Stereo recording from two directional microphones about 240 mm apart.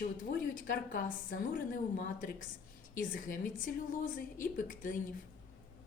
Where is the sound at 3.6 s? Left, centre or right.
Left.